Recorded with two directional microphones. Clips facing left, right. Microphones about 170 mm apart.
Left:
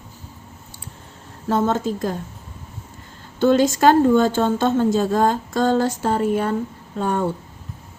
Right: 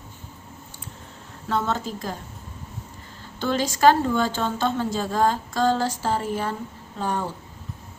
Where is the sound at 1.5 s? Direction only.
45° left (ahead or behind).